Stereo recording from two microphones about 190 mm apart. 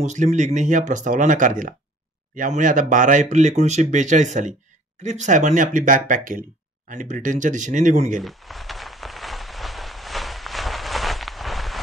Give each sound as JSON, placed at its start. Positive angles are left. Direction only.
{"t": 0.0, "sound": "speech", "side_deg": -40}
{"t": 8.2, "sound": "rain on surface", "side_deg": 0}